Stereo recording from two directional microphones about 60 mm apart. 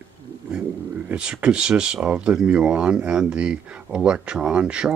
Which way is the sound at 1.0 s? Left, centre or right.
Centre.